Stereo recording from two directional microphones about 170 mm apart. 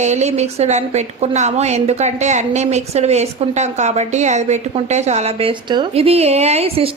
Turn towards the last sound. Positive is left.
turn(degrees=-35)  # may be behind; listen again after turning